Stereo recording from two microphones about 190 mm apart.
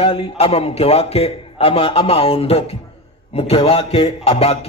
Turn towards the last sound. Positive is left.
turn(degrees=30)  # may be behind; listen again after turning